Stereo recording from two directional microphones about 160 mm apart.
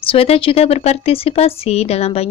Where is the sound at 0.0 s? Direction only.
35° left (ahead or behind).